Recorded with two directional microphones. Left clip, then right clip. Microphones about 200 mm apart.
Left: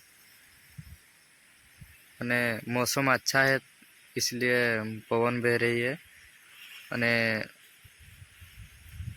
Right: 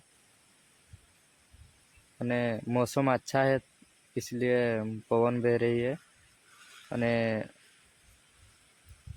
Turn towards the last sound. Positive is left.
turn(degrees=-15)  # may be behind; listen again after turning